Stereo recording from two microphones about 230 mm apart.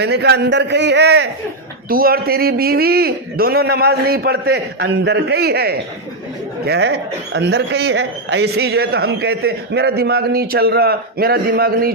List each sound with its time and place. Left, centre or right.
0.0 s speech: right